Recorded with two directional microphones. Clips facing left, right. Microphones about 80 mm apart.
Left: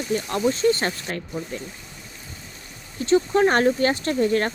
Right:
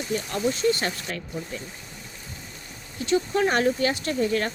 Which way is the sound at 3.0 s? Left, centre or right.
Left.